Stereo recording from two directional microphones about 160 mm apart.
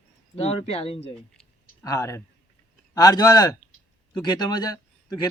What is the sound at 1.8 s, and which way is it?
A man's voice, 20° left (ahead or behind).